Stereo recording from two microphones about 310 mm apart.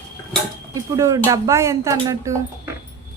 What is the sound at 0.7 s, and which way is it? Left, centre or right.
Speech, centre.